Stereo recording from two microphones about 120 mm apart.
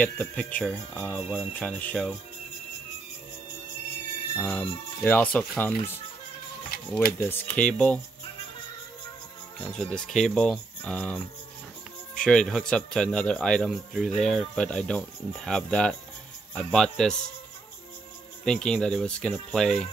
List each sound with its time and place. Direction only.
0.0 s speech: 10° left (ahead or behind)
4.4 s speech: 15° left (ahead or behind)
6.9 s speech: 15° left (ahead or behind)
9.6 s speech: 5° left (ahead or behind)
18.4 s speech: 5° left (ahead or behind)